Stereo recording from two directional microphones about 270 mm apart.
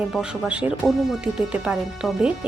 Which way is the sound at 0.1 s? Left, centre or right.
Centre.